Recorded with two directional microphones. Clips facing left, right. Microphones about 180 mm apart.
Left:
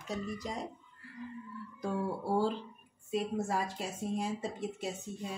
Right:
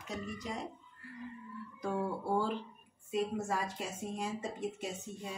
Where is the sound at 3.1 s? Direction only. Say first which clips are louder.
Left 1 dB; 35° left (ahead or behind).